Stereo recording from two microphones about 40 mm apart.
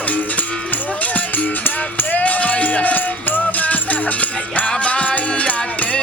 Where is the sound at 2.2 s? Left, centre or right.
Left.